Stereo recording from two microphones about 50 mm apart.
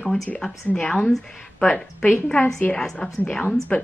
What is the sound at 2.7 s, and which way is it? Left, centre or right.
Speech, centre.